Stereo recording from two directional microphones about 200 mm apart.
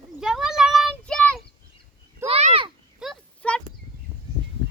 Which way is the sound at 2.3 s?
30° right (ahead or behind).